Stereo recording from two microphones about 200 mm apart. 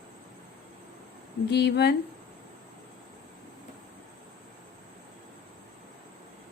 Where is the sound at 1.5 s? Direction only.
55° left (ahead or behind).